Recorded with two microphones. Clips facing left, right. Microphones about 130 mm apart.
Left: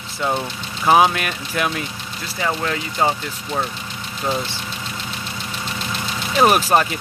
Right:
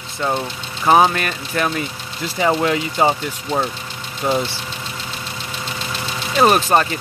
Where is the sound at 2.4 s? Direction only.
30° right (ahead or behind).